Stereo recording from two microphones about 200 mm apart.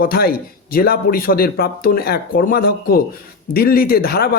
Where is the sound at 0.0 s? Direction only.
50° left (ahead or behind).